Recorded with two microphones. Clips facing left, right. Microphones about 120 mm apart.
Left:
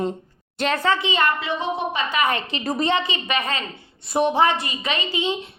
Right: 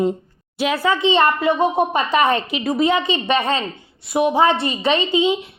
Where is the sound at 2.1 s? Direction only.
30° right (ahead or behind).